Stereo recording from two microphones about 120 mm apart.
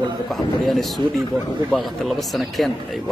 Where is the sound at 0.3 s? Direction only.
Centre (ahead or behind).